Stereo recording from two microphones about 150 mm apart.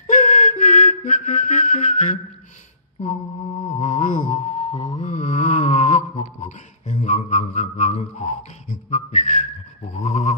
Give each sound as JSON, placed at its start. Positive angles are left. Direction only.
{"t": 0.0, "sound": "flute", "side_deg": 55}
{"t": 3.8, "sound": "music", "side_deg": 60}
{"t": 4.5, "sound": "music", "side_deg": 40}
{"t": 6.4, "sound": "a sound", "side_deg": 55}